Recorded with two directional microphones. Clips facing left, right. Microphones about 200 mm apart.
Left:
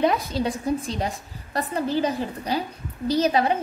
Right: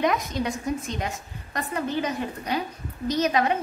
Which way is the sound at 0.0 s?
30° left (ahead or behind).